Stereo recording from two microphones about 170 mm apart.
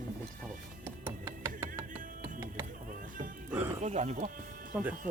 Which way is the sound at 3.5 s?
10° right (ahead or behind).